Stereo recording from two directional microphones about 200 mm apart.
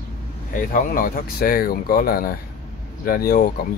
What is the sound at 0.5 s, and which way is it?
Speech, 45° left (ahead or behind).